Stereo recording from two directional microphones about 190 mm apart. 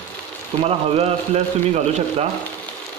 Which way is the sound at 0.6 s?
30° right (ahead or behind).